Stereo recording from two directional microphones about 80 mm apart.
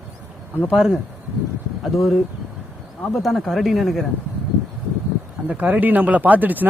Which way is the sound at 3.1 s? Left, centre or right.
Centre.